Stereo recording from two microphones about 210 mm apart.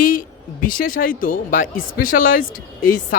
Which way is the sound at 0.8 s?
40° left (ahead or behind).